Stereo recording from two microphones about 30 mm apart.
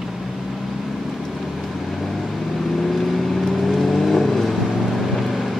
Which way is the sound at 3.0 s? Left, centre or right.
Centre.